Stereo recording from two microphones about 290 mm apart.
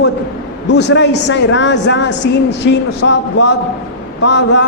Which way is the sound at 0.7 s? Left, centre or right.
Left.